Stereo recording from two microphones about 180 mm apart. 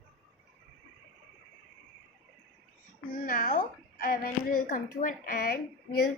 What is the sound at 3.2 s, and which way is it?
A woman's voice, 50° left (ahead or behind).